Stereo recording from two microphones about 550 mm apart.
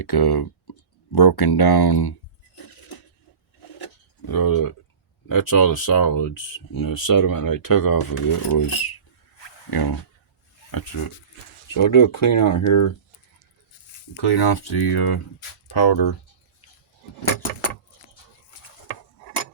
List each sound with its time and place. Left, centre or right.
0.0 s speech: left
4.3 s speech: left
9.4 s a sound: left
10.7 s speech: left
14.2 s speech: left